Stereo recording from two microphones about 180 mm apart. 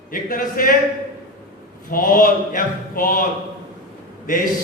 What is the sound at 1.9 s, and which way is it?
A man's voice, 50° left (ahead or behind).